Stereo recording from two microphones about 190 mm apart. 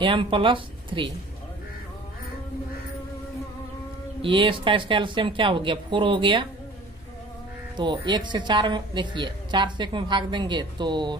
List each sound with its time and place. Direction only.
0.0 s speech: 25° right (ahead or behind)
4.2 s speech: 25° right (ahead or behind)
7.7 s speech: 25° right (ahead or behind)